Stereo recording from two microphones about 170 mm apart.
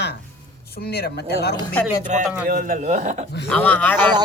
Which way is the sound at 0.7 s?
65° left (ahead or behind).